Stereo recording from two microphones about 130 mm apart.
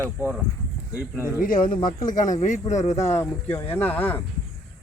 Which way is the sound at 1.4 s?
90° left.